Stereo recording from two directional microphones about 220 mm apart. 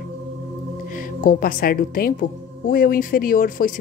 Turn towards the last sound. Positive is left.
turn(degrees=40)  # may be behind; listen again after turning